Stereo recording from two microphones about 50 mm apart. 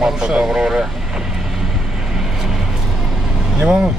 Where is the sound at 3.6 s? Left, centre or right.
Centre.